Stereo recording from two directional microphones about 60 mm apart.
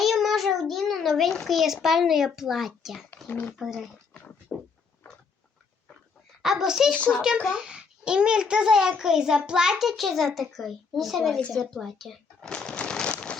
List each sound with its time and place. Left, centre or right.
0.0 s child singing: centre
1.5 s a child's voice: centre
3.2 s speech: left
3.6 s a child's voice: centre
4.5 s a sound: centre
6.4 s a child's voice: centre
12.5 s shuffling cards: centre